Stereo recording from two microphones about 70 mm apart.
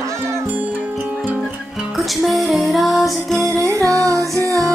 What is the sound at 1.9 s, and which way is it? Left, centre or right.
Music, centre.